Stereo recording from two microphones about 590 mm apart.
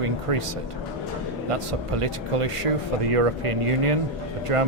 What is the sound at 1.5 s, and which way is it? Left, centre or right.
Speech, right.